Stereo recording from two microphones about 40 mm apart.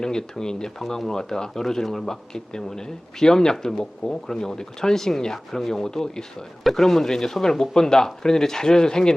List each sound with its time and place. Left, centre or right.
0.0 s speech: centre